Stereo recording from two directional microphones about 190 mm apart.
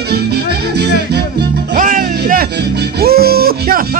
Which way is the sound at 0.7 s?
60° right (ahead or behind).